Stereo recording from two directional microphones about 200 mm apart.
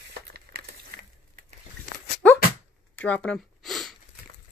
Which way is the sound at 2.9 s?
5° left (ahead or behind).